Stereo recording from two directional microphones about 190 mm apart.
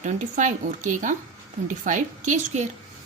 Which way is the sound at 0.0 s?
40° right (ahead or behind).